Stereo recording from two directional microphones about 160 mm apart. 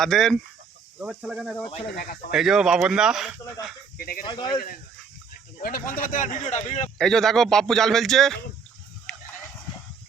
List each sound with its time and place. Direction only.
0.0 s speech: centre (ahead or behind)
2.0 s speech: 65° left (ahead or behind)
2.3 s speech: 5° right (ahead or behind)
3.9 s speech: 65° left (ahead or behind)
4.3 s speech: 30° left (ahead or behind)
5.6 s speech: 65° left (ahead or behind); by 6.9 s 45° left (ahead or behind)
7.0 s speech: 5° left (ahead or behind)
9.1 s a sound: 5° left (ahead or behind)